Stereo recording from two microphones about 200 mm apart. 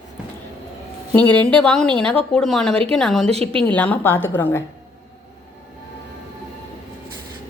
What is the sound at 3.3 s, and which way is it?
Speech, 30° right (ahead or behind).